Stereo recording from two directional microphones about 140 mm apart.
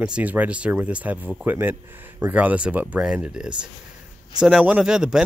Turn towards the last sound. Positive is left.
turn(degrees=-5)  # may be behind; listen again after turning